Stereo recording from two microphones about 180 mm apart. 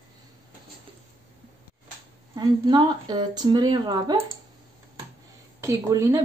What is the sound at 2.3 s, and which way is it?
Speech, 25° right (ahead or behind).